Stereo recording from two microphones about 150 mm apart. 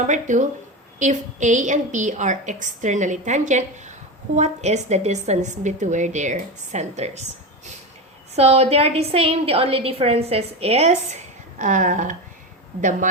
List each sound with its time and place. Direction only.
0.0 s a woman's voice: 55° right (ahead or behind)
11.6 s a woman's voice: 60° right (ahead or behind)